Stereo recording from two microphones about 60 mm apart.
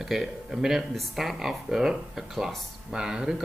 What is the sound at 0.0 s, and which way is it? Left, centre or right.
Speech, centre.